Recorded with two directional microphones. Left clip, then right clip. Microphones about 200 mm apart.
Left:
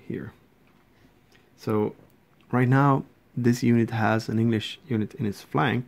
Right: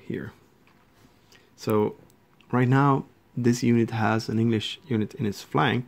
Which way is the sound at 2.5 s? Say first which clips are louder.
Even; 5° left (ahead or behind).